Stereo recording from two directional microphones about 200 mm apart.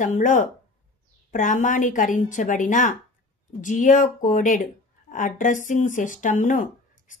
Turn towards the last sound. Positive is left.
turn(degrees=40)  # may be behind; listen again after turning